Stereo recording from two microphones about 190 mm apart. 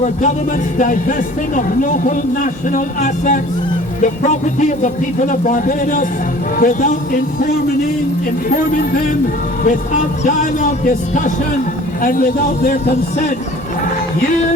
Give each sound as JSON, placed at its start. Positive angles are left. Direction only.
{"t": 0.8, "sound": "speech", "side_deg": 45}
{"t": 8.4, "sound": "speech", "side_deg": 50}